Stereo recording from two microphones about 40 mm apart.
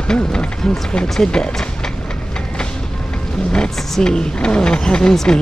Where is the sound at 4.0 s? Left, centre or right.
Left.